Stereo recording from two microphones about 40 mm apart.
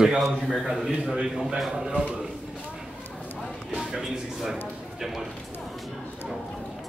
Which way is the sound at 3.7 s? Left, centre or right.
Centre.